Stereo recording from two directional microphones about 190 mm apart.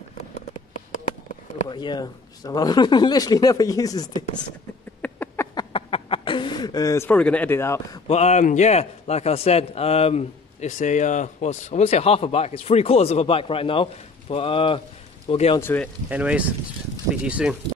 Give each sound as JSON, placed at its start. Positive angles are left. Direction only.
{"t": 1.7, "sound": "speech", "side_deg": 25}
{"t": 5.0, "sound": "a sound", "side_deg": 10}
{"t": 8.1, "sound": "a man's voice", "side_deg": 35}
{"t": 15.6, "sound": "speech", "side_deg": 10}
{"t": 16.1, "sound": "speech", "side_deg": -5}